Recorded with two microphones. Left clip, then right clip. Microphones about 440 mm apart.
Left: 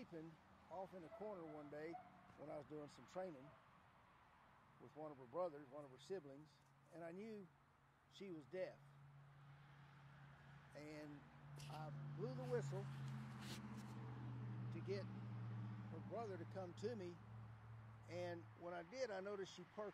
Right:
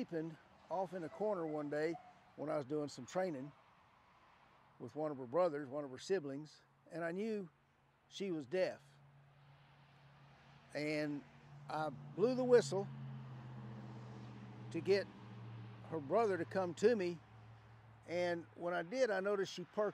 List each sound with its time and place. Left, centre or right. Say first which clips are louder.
0.1 s speech: right 14 dB; right
4.8 s speech: right 14 dB; right
10.7 s speech: right 17 dB; right
14.7 s speech: right 16 dB; right
16.2 s speech: right 16 dB; right
18.0 s speech: right 12 dB; right